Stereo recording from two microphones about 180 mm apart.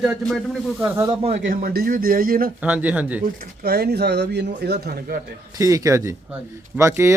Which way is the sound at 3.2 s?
60° right (ahead or behind).